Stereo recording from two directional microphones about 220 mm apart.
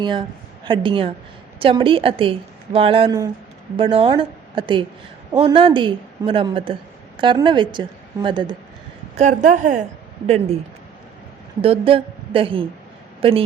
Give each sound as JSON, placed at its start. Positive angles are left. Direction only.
{"t": 0.0, "sound": "a woman's voice", "side_deg": -20}
{"t": 9.1, "sound": "a woman's voice", "side_deg": -35}
{"t": 11.6, "sound": "a woman's voice", "side_deg": -25}